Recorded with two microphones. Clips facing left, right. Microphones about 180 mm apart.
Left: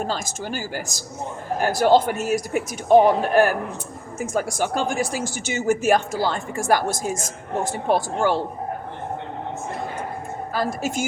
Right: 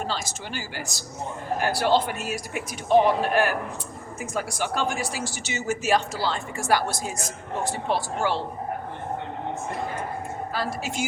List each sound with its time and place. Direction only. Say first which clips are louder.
0.1 s speech: left 4 dB; 45° left (ahead or behind)
10.5 s speech: left 6 dB; 45° left (ahead or behind)